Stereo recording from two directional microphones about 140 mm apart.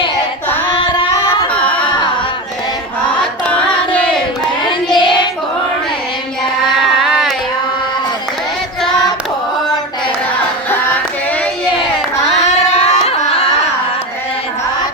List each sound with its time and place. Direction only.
1.5 s a sound: 10° left (ahead or behind)
3.5 s music: 10° left (ahead or behind)
4.9 s child singing: 35° left (ahead or behind)
7.0 s a sound: centre (ahead or behind)
10.7 s music: 15° left (ahead or behind)
12.7 s carnatic music: 50° left (ahead or behind)